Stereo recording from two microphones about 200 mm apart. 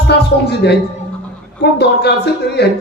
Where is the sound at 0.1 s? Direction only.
55° left (ahead or behind).